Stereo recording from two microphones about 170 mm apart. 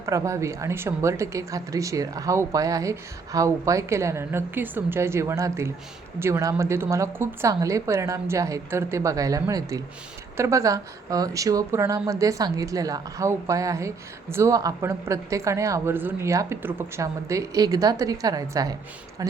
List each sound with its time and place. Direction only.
0.0 s a woman's voice: 15° right (ahead or behind)